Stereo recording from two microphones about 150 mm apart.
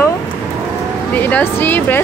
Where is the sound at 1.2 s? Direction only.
10° left (ahead or behind).